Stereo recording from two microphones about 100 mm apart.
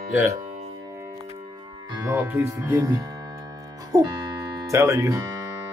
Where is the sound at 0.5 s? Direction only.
90° right.